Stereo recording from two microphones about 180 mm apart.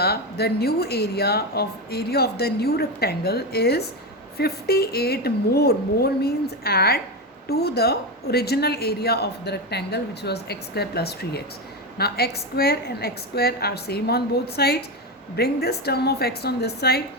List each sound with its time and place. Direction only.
0.0 s a woman's voice: 60° left (ahead or behind)